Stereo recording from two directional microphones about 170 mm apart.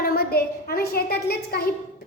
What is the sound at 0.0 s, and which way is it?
A woman's voice, 65° left (ahead or behind).